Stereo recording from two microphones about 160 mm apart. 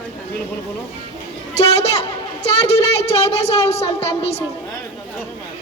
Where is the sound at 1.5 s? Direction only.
40° left (ahead or behind).